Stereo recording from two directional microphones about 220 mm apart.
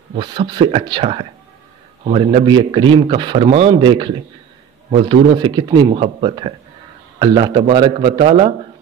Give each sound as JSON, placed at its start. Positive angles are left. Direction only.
{"t": 0.2, "sound": "a man's voice", "side_deg": -20}